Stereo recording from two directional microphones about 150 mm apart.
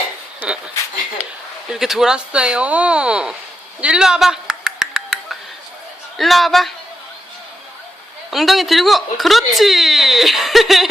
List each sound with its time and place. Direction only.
1.7 s speech: centre (ahead or behind)
3.8 s a sound: 5° right (ahead or behind)
6.1 s speech: centre (ahead or behind)
8.3 s speech: centre (ahead or behind)